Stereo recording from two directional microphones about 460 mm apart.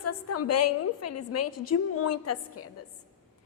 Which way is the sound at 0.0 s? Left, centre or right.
Left.